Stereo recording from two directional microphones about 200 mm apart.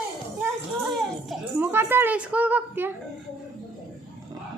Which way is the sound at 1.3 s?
10° right (ahead or behind).